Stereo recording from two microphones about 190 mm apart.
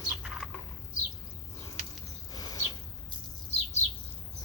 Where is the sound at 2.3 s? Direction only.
20° left (ahead or behind).